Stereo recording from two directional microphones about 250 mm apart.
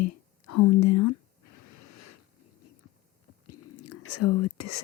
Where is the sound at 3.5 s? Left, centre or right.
Left.